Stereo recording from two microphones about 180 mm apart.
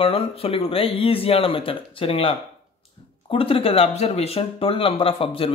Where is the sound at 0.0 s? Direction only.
30° left (ahead or behind).